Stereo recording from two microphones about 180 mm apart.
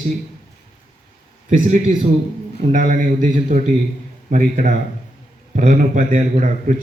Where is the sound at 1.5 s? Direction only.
40° right (ahead or behind).